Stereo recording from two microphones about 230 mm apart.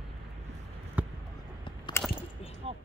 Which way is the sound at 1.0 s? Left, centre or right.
Centre.